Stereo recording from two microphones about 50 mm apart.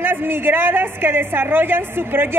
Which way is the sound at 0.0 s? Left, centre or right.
Right.